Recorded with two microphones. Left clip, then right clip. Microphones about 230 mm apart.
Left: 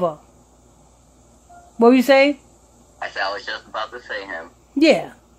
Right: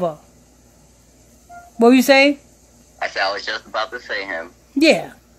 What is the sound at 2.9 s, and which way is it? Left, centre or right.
A man's voice, right.